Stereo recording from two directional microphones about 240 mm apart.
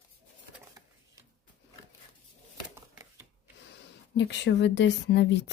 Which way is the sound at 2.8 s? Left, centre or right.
Centre.